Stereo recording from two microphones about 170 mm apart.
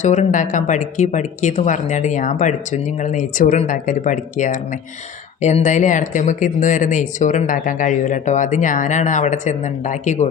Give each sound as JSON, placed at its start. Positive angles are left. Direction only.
{"t": 0.0, "sound": "speech", "side_deg": 45}